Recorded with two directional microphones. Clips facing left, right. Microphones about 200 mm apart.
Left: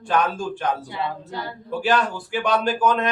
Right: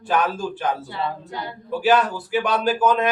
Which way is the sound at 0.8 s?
15° left (ahead or behind).